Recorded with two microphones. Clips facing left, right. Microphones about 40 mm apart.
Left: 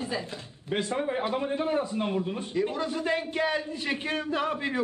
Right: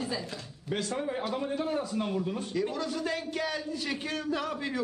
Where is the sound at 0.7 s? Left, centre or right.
Left.